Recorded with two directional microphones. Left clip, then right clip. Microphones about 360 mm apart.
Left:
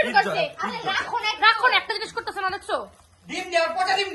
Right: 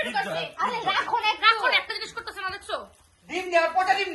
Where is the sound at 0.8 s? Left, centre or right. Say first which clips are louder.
Left 1 dB; centre.